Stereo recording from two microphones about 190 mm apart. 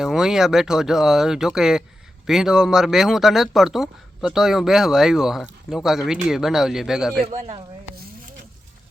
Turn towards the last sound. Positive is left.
turn(degrees=-35)  # may be behind; listen again after turning